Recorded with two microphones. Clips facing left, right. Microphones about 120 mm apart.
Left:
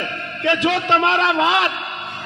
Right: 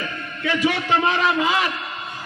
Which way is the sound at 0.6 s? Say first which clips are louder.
Left 1 dB; 75° left (ahead or behind).